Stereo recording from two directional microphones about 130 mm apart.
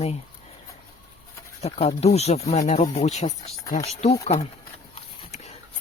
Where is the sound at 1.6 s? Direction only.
55° left (ahead or behind).